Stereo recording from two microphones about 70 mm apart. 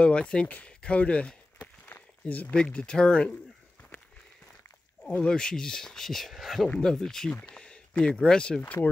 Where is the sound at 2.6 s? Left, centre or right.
Centre.